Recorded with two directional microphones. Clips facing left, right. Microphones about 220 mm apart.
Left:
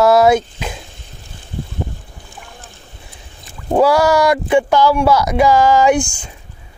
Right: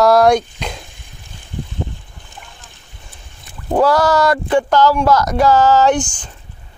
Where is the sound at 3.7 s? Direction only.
10° left (ahead or behind).